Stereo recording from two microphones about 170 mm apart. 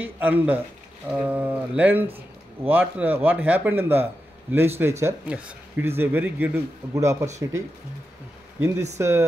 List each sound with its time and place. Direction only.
0.0 s speech: 10° right (ahead or behind)
8.5 s speech: 15° right (ahead or behind)